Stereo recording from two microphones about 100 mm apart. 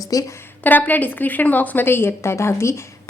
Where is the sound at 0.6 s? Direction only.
15° left (ahead or behind).